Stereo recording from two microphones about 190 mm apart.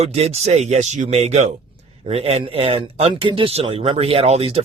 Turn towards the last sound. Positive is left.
turn(degrees=-30)  # may be behind; listen again after turning